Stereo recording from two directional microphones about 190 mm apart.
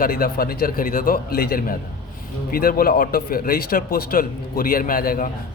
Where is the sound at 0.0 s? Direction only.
50° left (ahead or behind).